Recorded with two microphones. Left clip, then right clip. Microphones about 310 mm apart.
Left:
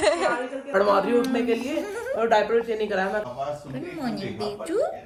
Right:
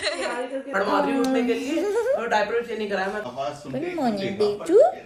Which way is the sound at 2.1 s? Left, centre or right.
Left.